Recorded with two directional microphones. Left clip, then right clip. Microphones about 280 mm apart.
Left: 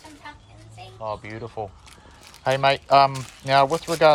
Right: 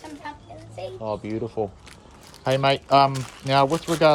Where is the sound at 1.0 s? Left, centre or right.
Left.